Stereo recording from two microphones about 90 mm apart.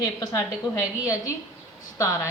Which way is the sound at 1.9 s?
35° left (ahead or behind).